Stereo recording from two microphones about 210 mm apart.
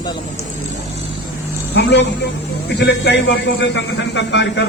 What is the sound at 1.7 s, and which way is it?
A man's voice, 55° left (ahead or behind).